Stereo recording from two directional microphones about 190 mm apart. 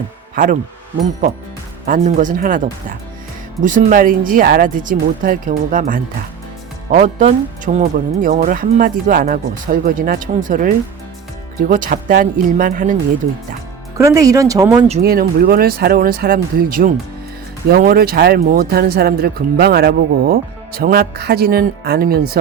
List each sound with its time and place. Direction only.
0.3 s speech: 45° right (ahead or behind)
1.9 s speech: 40° right (ahead or behind)
6.9 s speech: 35° right (ahead or behind)
11.7 s speech: 45° right (ahead or behind)
13.9 s speech: 20° right (ahead or behind)
15.0 s speech: 50° right (ahead or behind)